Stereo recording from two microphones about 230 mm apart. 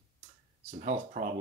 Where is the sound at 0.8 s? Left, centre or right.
Right.